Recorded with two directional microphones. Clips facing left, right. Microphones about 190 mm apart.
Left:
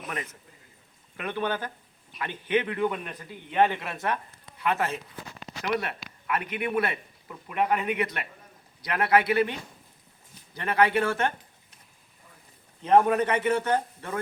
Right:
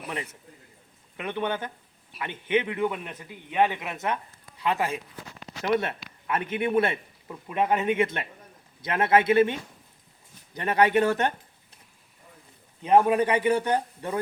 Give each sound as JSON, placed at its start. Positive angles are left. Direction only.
{"t": 1.1, "sound": "a man's voice", "side_deg": -20}
{"t": 5.6, "sound": "a man's voice", "side_deg": -25}
{"t": 12.8, "sound": "a man's voice", "side_deg": -10}